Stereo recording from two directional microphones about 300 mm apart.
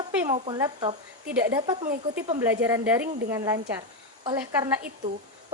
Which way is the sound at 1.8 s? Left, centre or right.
Right.